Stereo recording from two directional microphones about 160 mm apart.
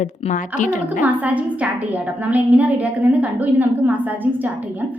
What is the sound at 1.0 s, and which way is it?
A woman's voice, 10° right (ahead or behind).